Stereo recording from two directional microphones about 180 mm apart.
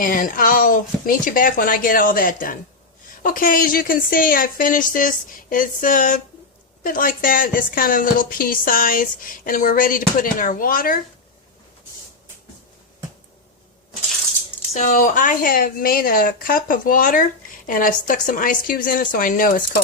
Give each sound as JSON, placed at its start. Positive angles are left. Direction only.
{"t": 0.0, "sound": "speech", "side_deg": 50}
{"t": 14.7, "sound": "speech", "side_deg": 40}